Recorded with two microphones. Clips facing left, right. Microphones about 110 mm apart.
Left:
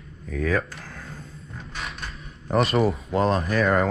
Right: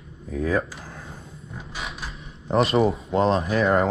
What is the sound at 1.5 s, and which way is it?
Creak, 5° right (ahead or behind).